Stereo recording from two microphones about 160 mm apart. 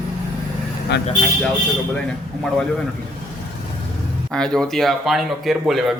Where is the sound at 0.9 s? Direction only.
90° left.